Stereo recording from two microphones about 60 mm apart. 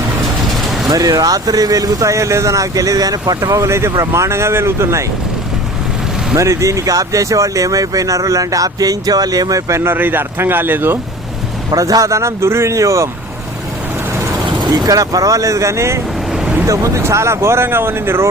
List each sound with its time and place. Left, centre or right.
0.9 s speech: right
3.4 s speech: right
3.9 s speech: right
6.3 s speech: right
9.8 s speech: right
11.7 s speech: right
14.8 s speech: right
16.3 s a sound: centre
16.6 s speech: right